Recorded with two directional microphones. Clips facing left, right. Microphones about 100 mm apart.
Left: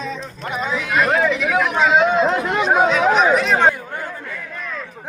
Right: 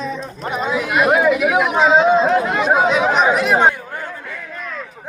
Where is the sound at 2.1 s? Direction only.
40° right (ahead or behind).